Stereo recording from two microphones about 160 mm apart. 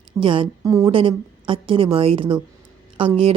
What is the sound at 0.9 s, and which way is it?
Speech, 35° right (ahead or behind).